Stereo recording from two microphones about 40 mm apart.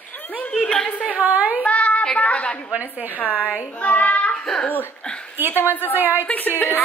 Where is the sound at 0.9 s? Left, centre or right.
Left.